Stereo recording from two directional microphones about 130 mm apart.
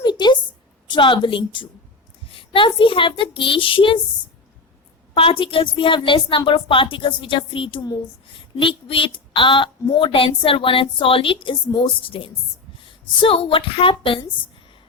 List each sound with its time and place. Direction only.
0.0 s a sound: 35° left (ahead or behind)
0.9 s a woman's voice: 40° left (ahead or behind)
5.1 s a woman's voice: 45° left (ahead or behind)